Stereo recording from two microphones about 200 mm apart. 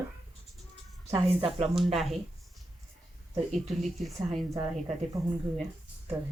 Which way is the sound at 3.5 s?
Centre (ahead or behind).